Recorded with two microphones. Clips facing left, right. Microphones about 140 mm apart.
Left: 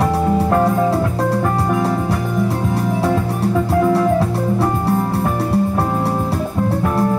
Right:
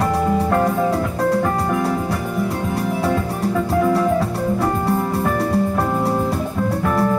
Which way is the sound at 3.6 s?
10° left (ahead or behind).